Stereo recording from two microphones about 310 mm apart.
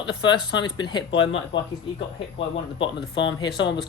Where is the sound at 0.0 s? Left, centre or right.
Centre.